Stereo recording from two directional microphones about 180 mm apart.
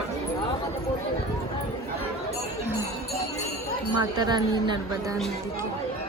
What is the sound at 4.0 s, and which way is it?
A woman's voice, 25° right (ahead or behind).